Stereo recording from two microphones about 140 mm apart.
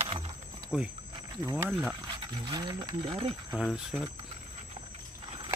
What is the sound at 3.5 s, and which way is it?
Speech, 5° right (ahead or behind).